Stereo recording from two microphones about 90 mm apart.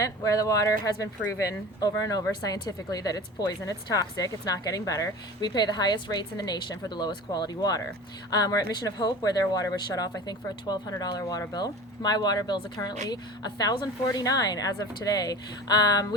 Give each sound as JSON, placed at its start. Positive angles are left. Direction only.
{"t": 0.0, "sound": "speech", "side_deg": 40}
{"t": 5.5, "sound": "speech", "side_deg": 55}